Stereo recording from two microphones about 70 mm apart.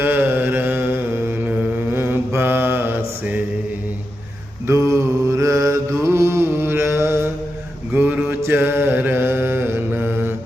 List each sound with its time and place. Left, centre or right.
0.0 s carnatic music: right
1.5 s mantra: right
4.6 s mantra: right